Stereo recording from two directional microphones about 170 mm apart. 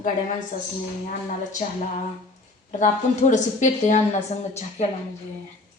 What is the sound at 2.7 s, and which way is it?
A woman's voice, 45° left (ahead or behind).